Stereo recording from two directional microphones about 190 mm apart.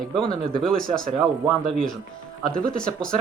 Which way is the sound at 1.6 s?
5° left (ahead or behind).